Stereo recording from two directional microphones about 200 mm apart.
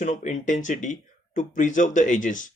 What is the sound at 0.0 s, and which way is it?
Speech, 35° left (ahead or behind).